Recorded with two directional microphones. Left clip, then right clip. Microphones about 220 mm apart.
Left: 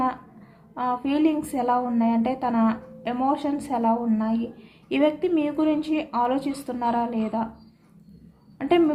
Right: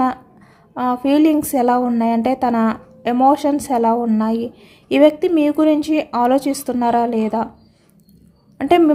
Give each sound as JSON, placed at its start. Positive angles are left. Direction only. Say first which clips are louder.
{"t": 0.7, "sound": "a woman's voice", "louder": "right 8 dB", "side_deg": -50}
{"t": 8.5, "sound": "a woman's voice", "louder": "right 7 dB", "side_deg": -50}